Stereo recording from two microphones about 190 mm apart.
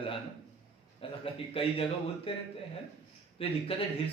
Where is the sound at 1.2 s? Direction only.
30° left (ahead or behind).